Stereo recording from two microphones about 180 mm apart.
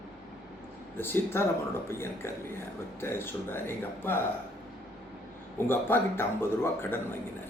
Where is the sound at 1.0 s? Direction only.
10° left (ahead or behind).